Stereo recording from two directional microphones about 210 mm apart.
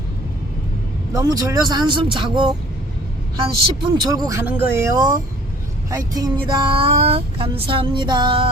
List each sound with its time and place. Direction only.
1.1 s speech: 20° right (ahead or behind)